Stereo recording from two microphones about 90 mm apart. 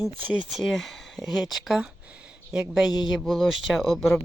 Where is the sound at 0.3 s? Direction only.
10° right (ahead or behind).